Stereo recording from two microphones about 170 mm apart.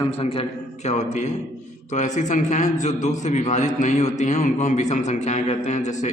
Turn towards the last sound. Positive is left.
turn(degrees=45)  # may be behind; listen again after turning